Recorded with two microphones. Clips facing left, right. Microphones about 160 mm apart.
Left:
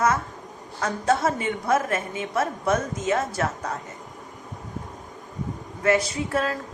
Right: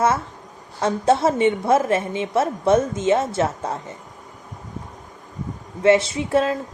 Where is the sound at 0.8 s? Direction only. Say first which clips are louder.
Right 5 dB; 25° right (ahead or behind).